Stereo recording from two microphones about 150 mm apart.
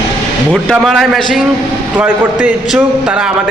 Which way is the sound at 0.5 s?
Centre (ahead or behind).